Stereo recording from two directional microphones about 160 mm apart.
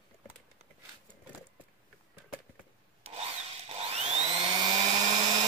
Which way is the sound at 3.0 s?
40° right (ahead or behind).